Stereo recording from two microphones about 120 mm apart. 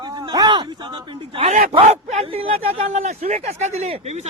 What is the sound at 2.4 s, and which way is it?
Speech, 60° right (ahead or behind).